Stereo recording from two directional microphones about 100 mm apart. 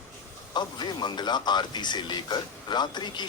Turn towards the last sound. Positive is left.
turn(degrees=45)  # may be behind; listen again after turning